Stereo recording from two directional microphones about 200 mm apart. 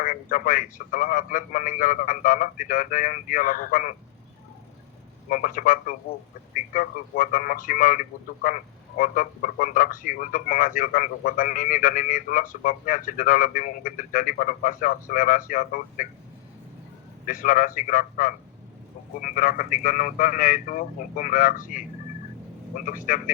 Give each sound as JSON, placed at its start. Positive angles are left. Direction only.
{"t": 0.0, "sound": "speech", "side_deg": 45}
{"t": 5.3, "sound": "a man's voice", "side_deg": 40}
{"t": 17.2, "sound": "a man's voice", "side_deg": 40}